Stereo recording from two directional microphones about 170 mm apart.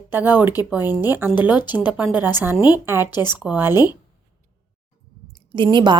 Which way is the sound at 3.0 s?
25° left (ahead or behind).